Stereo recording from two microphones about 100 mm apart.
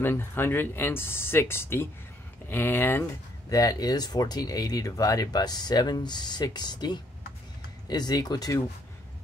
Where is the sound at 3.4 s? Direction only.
35° left (ahead or behind).